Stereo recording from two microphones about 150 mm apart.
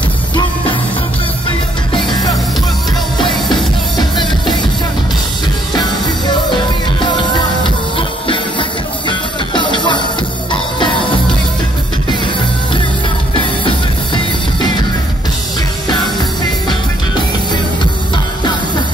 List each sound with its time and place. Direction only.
1.9 s music: 30° left (ahead or behind)
3.9 s music: 30° left (ahead or behind)
5.8 s music: 30° left (ahead or behind)
13.3 s music: 35° left (ahead or behind)
16.6 s music: 30° left (ahead or behind)